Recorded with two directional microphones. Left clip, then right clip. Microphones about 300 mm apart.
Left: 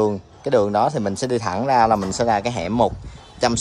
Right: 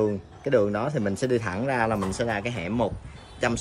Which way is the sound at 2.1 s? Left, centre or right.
Left.